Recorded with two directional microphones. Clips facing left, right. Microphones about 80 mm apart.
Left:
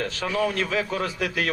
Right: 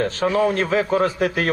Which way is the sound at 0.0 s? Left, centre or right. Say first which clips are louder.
Right 6 dB; right.